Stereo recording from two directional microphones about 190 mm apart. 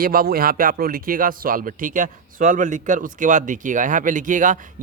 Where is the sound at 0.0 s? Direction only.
50° right (ahead or behind).